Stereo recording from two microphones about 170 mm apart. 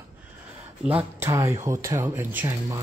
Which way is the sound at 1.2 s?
15° right (ahead or behind).